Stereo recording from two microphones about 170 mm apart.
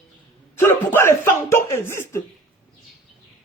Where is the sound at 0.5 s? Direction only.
15° left (ahead or behind).